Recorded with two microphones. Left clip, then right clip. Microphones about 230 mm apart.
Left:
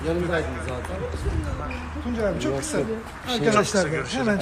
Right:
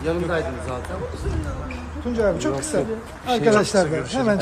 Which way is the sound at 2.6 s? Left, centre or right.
Right.